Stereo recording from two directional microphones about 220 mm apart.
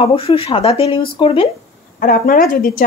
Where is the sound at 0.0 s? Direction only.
25° left (ahead or behind).